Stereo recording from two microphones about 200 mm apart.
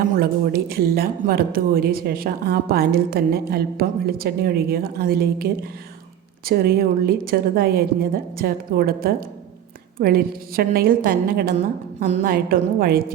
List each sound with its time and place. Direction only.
0.2 s speech: 50° right (ahead or behind)